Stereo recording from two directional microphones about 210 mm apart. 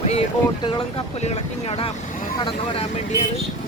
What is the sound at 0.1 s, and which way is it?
Speech, 25° left (ahead or behind).